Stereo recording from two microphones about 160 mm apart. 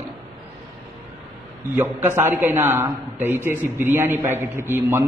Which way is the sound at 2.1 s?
15° right (ahead or behind).